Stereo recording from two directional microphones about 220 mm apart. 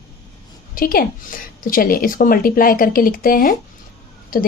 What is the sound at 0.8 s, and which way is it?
Speech, 40° left (ahead or behind).